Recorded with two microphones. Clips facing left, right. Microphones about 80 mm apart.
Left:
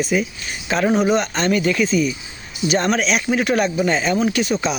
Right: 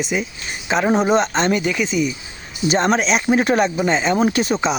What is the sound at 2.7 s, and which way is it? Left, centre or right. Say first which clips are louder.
Speech: right 2 dB; right.